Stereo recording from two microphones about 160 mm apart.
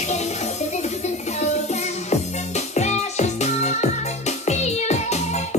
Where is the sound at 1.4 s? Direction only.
45° left (ahead or behind).